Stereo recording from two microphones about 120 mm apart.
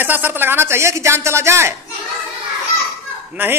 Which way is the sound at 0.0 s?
15° right (ahead or behind).